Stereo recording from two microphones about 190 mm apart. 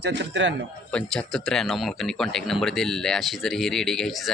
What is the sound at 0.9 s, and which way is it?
Speech, 5° left (ahead or behind).